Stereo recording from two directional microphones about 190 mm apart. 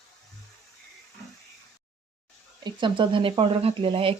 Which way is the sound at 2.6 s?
25° right (ahead or behind).